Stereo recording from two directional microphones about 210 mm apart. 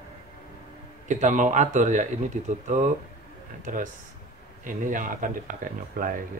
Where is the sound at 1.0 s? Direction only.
35° right (ahead or behind).